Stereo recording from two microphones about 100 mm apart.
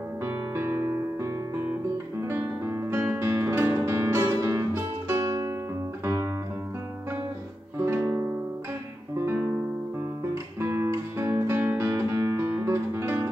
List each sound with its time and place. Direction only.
0.2 s music: 25° right (ahead or behind)
7.8 s music: 25° right (ahead or behind)
9.1 s guitar: 25° right (ahead or behind)
11.7 s music: 25° right (ahead or behind)